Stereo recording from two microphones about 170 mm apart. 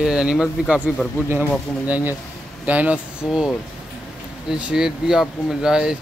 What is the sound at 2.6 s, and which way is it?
Speech, 10° right (ahead or behind).